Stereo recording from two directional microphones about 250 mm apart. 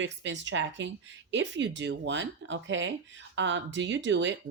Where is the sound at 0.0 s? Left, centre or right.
Right.